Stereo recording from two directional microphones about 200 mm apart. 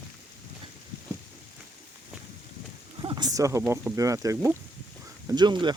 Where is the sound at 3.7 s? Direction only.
15° right (ahead or behind).